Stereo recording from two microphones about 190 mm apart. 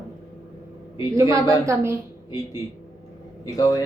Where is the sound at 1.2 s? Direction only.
15° right (ahead or behind).